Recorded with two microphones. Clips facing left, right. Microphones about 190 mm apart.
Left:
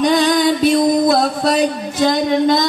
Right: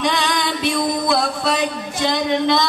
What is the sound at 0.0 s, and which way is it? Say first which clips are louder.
Music: left 8 dB; 40° left (ahead or behind).